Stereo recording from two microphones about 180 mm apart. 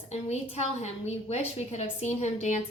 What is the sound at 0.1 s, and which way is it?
A woman's voice, 35° left (ahead or behind).